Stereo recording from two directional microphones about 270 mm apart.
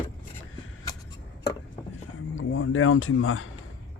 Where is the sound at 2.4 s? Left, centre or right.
Left.